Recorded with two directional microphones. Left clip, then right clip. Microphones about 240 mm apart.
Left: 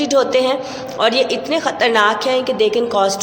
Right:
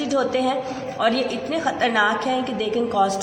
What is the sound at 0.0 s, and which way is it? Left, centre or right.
A woman's voice, left.